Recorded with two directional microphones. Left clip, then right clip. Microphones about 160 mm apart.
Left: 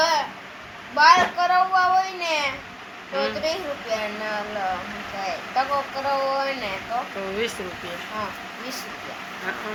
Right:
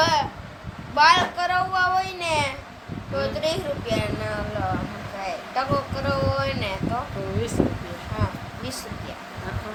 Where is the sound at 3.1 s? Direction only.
15° right (ahead or behind).